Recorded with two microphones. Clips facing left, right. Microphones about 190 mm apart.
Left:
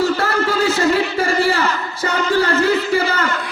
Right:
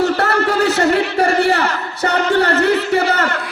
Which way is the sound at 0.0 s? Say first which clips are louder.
Right 2 dB; 65° right (ahead or behind).